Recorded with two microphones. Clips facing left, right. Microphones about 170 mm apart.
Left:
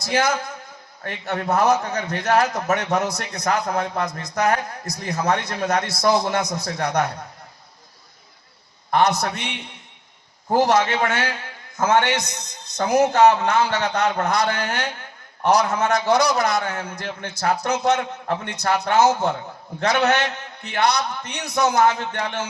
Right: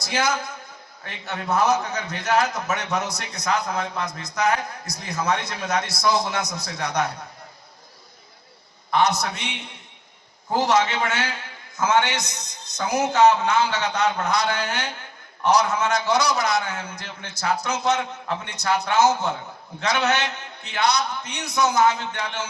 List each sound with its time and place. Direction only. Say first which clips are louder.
0.0 s a man's voice: left 3 dB; 55° left (ahead or behind)
8.9 s a man's voice: left 2 dB; 55° left (ahead or behind)